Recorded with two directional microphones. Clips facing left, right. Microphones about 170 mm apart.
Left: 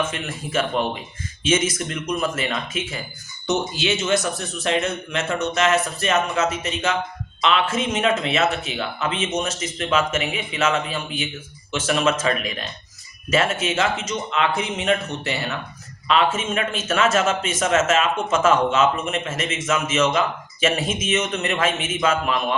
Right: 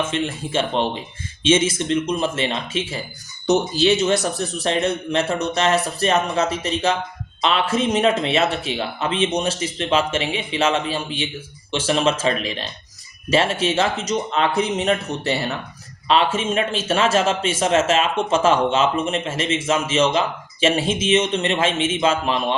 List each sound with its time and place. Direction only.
0.0 s speech: 30° right (ahead or behind)